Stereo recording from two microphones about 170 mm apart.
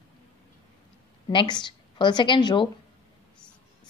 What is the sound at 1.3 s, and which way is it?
A woman's voice, 25° left (ahead or behind).